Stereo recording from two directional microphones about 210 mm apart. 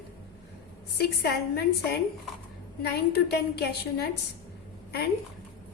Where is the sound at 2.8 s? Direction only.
50° left (ahead or behind).